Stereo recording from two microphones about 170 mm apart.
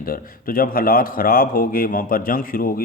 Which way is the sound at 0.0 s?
60° left (ahead or behind).